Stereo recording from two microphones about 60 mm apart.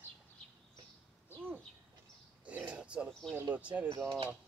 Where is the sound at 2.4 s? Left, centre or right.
Right.